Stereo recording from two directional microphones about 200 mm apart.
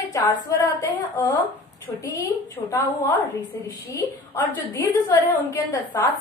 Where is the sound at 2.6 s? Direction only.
15° left (ahead or behind).